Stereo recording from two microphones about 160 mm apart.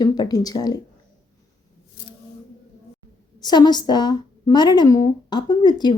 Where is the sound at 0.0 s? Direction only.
25° left (ahead or behind).